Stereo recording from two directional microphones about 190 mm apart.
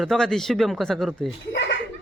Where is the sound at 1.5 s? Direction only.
65° left (ahead or behind).